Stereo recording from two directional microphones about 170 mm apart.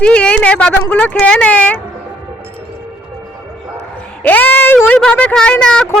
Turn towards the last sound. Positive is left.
turn(degrees=5)  # may be behind; listen again after turning